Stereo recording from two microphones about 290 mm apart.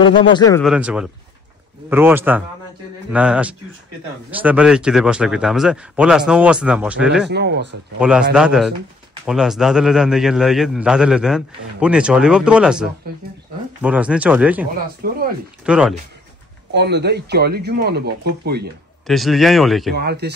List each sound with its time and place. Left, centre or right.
0.0 s speech: centre
0.7 s a man's voice: centre
7.2 s speech: right
8.0 s a man's voice: centre
15.0 s speech: right
15.6 s speech: centre
16.7 s speech: right
19.0 s a man's voice: centre
20.0 s speech: right